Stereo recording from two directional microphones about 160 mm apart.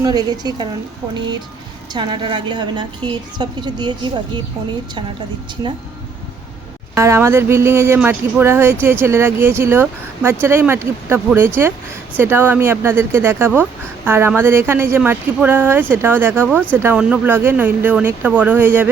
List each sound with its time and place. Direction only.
0.0 s a woman's voice: 25° right (ahead or behind)
1.9 s a woman's voice: 30° right (ahead or behind)
6.9 s speech: 15° right (ahead or behind)